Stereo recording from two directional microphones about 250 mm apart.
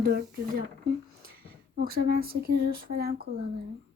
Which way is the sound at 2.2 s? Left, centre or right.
Right.